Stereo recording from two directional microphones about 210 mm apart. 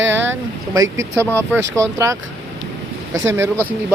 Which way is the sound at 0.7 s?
15° right (ahead or behind).